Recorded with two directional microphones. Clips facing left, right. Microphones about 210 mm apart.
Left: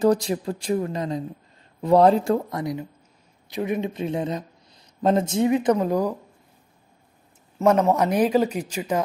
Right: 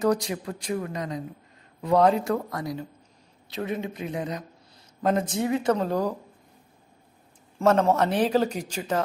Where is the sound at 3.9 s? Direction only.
30° left (ahead or behind); by 6.1 s 10° left (ahead or behind).